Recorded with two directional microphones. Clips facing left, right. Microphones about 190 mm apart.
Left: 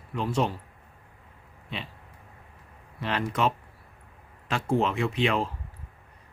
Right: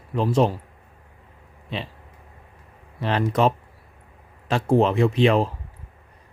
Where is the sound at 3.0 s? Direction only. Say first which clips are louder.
Right 6 dB; 35° right (ahead or behind).